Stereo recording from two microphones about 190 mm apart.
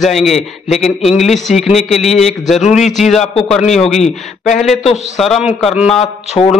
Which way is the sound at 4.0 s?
40° left (ahead or behind).